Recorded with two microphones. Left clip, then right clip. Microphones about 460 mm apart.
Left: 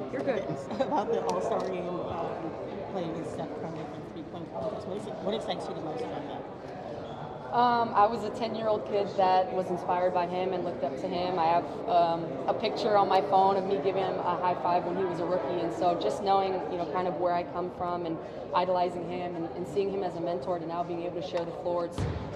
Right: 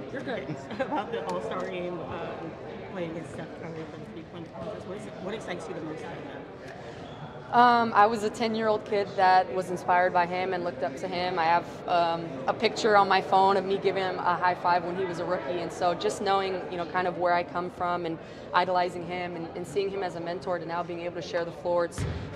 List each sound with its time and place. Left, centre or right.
0.7 s speech: right
7.5 s a woman's voice: right